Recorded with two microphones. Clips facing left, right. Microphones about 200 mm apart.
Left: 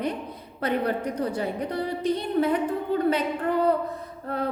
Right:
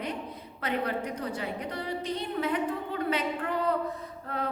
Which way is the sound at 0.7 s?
35° left (ahead or behind).